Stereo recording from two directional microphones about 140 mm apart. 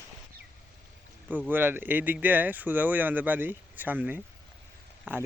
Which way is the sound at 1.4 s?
15° right (ahead or behind).